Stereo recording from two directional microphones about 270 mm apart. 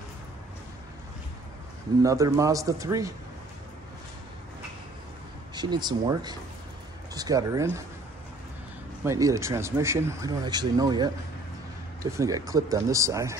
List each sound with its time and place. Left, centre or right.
2.0 s speech: centre
5.5 s speech: centre
9.0 s speech: centre